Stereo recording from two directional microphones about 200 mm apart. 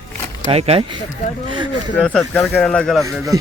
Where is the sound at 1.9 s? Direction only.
5° left (ahead or behind).